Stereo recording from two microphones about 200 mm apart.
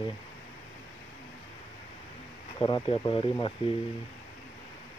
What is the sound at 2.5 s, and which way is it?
Speech, 25° left (ahead or behind).